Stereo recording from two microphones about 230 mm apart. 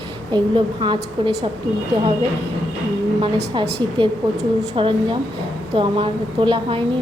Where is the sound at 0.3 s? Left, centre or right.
Right.